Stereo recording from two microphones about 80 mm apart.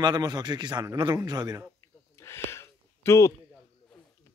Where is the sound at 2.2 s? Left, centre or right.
Left.